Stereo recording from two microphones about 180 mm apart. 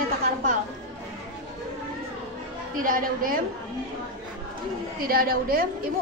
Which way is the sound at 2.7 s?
50° right (ahead or behind).